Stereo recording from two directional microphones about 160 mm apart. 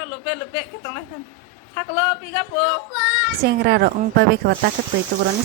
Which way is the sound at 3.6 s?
90° right.